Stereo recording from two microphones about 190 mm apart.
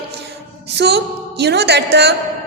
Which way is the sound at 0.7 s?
60° right (ahead or behind).